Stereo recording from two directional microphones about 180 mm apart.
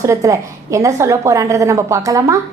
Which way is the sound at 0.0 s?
15° right (ahead or behind).